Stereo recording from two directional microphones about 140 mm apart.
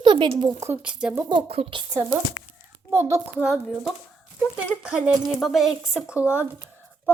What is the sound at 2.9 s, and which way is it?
Speech, 20° right (ahead or behind).